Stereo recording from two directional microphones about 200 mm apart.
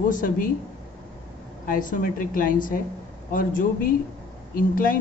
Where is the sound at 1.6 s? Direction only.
45° left (ahead or behind).